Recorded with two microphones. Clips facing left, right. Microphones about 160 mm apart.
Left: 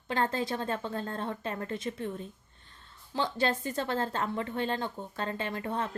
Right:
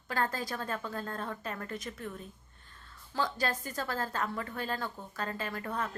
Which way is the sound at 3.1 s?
25° left (ahead or behind).